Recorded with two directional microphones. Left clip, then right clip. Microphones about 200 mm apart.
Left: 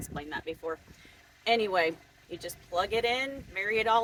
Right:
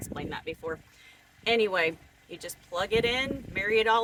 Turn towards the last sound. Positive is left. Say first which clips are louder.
# right 2 dB
turn(degrees=-20)  # may be behind; listen again after turning